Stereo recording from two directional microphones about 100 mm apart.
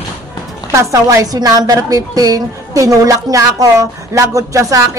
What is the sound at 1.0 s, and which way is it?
A woman's voice, 35° right (ahead or behind).